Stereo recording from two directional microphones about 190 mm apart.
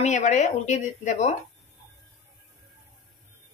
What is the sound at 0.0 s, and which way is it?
Speech, 40° left (ahead or behind).